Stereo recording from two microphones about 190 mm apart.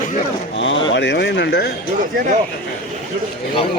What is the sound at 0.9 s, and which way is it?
Speech, 65° left (ahead or behind).